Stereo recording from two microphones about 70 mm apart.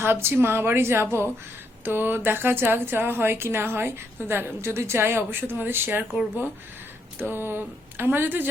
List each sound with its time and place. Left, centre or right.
0.0 s speech: right
7.2 s speech: right